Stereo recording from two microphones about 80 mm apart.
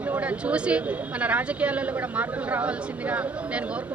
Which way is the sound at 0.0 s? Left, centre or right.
Centre.